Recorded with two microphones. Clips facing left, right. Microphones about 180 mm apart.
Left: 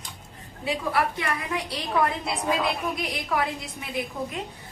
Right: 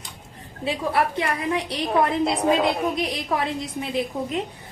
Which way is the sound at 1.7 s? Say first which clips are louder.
Right 3 dB; 30° right (ahead or behind).